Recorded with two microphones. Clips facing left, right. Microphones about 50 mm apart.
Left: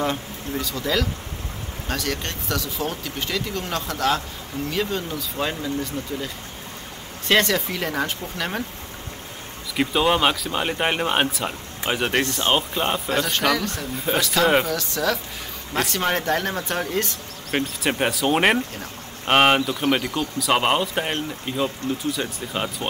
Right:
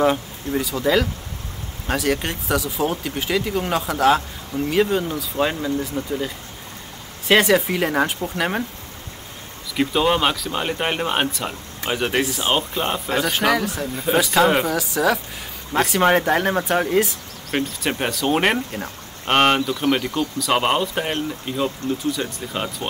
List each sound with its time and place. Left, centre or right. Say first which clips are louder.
0.0 s speech: right 6 dB; centre
7.2 s speech: right 4 dB; centre
9.8 s speech: right 1 dB; centre
12.2 s speech: even; centre
16.0 s speech: right 7 dB; centre
17.5 s speech: even; centre